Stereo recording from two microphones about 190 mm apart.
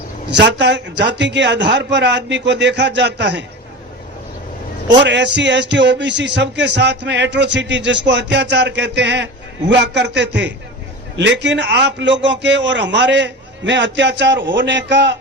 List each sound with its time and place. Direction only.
0.3 s speech: 65° right (ahead or behind)
5.0 s speech: 65° right (ahead or behind)